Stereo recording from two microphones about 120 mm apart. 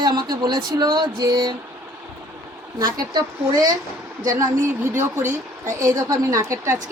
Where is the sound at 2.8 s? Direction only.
35° right (ahead or behind).